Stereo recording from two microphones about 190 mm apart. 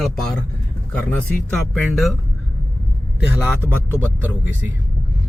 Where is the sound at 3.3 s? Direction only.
10° right (ahead or behind).